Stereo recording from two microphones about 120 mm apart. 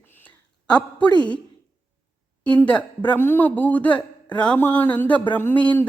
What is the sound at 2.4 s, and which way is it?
Speech, 10° left (ahead or behind).